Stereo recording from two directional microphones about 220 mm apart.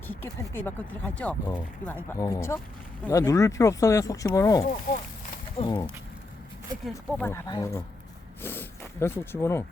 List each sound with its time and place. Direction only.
0.1 s speech: 10° left (ahead or behind)
4.6 s speech: 40° left (ahead or behind)
5.5 s speech: 20° left (ahead or behind)
6.8 s speech: centre (ahead or behind)
7.3 s speech: 15° left (ahead or behind)